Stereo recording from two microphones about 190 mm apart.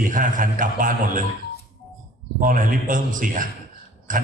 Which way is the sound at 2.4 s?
45° right (ahead or behind).